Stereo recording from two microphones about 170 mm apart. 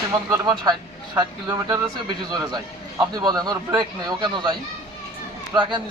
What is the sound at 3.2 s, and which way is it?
A man's voice, 25° right (ahead or behind).